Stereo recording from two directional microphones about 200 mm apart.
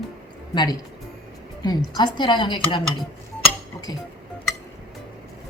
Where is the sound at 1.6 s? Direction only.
20° left (ahead or behind).